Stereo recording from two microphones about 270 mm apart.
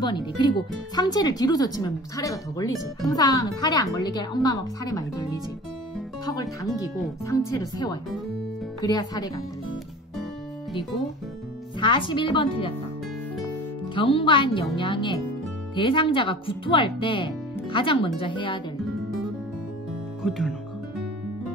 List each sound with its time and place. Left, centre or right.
0.0 s speech: centre
6.2 s speech: centre
11.8 s speech: centre
13.9 s speech: centre
20.2 s speech: centre